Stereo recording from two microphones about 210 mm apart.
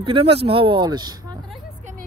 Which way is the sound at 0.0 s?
25° right (ahead or behind).